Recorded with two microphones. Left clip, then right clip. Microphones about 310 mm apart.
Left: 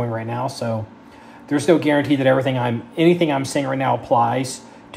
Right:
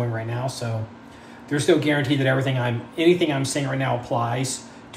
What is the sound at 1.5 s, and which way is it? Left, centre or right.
Speech, left.